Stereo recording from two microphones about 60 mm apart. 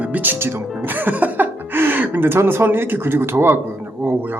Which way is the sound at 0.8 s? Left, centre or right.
Right.